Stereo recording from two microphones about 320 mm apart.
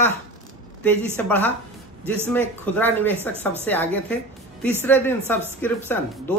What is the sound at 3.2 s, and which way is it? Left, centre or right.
Speech, centre.